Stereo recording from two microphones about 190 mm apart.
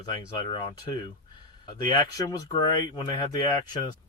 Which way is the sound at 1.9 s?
20° left (ahead or behind).